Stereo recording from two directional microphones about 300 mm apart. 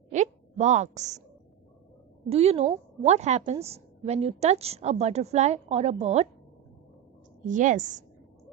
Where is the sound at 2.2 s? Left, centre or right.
Centre.